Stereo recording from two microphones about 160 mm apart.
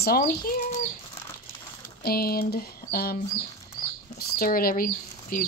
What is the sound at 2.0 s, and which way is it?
Speech, 70° left (ahead or behind).